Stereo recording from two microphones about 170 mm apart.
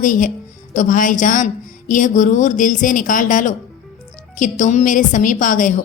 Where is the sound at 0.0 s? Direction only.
50° left (ahead or behind).